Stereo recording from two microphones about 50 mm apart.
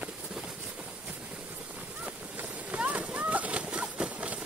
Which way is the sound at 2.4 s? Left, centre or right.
Right.